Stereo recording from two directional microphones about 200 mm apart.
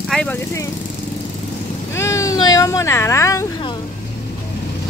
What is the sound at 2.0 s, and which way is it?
Speech, 15° left (ahead or behind).